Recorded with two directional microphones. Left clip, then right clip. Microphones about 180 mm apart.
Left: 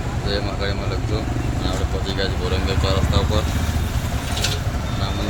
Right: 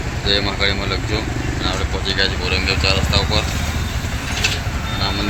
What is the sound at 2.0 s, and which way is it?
Speech, 15° left (ahead or behind).